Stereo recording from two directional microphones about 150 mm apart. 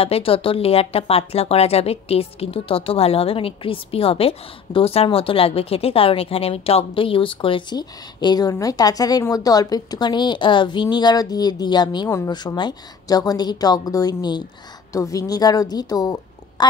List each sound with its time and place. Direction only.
0.0 s a woman's voice: 40° left (ahead or behind); by 16.6 s 25° left (ahead or behind)